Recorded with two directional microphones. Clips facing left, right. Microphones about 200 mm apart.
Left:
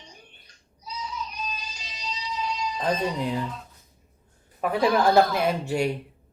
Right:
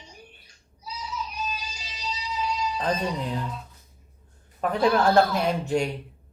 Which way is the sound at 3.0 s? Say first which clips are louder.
Left 2 dB; 5° left (ahead or behind).